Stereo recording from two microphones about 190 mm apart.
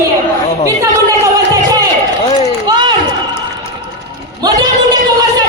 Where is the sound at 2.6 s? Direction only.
25° right (ahead or behind).